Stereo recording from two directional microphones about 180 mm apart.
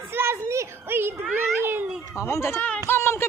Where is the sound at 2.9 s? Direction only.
15° left (ahead or behind).